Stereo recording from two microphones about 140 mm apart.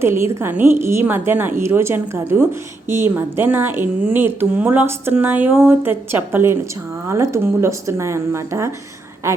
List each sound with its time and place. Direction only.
0.0 s speech: 20° right (ahead or behind)